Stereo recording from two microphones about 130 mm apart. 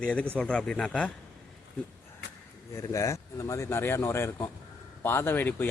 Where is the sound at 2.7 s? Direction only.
25° left (ahead or behind).